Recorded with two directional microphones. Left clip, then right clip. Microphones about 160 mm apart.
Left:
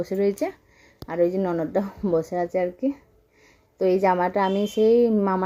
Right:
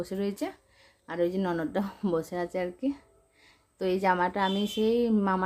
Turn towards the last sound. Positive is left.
turn(degrees=15)  # may be behind; listen again after turning